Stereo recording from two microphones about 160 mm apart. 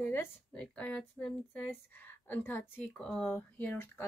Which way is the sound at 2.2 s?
10° left (ahead or behind).